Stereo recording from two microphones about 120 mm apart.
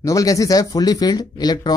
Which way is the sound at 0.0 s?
30° left (ahead or behind).